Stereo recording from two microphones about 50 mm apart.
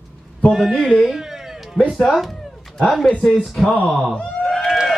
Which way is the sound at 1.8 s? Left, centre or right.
Centre.